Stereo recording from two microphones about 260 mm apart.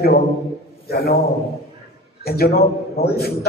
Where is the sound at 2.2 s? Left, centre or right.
Left.